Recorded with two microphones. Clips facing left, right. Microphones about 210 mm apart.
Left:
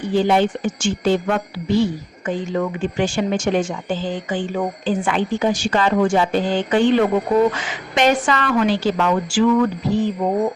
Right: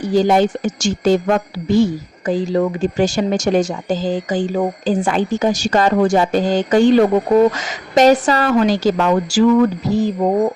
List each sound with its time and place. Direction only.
0.0 s speech: 40° right (ahead or behind)